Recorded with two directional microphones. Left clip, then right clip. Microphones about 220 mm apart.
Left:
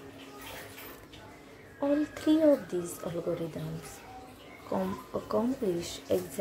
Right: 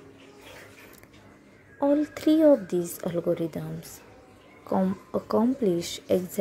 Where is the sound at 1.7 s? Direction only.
35° right (ahead or behind).